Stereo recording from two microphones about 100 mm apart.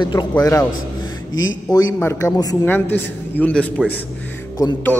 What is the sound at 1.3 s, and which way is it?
Speech, 40° left (ahead or behind).